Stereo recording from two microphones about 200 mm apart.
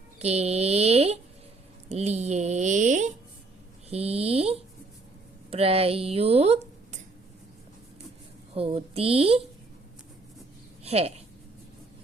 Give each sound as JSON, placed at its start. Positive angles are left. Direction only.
{"t": 0.2, "sound": "speech", "side_deg": -30}
{"t": 8.5, "sound": "speech", "side_deg": -30}
{"t": 10.8, "sound": "speech", "side_deg": -30}